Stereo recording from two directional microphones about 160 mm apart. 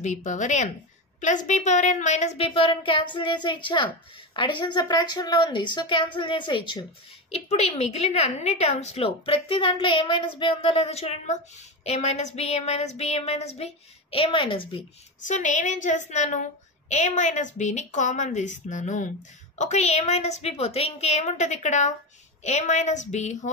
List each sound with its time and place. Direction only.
0.0 s a woman's voice: 50° left (ahead or behind); by 6.8 s 30° left (ahead or behind)
7.2 s a woman's voice: 40° left (ahead or behind)
15.2 s a woman's voice: 50° left (ahead or behind)